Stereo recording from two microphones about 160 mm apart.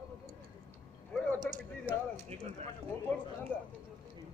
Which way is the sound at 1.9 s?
10° right (ahead or behind).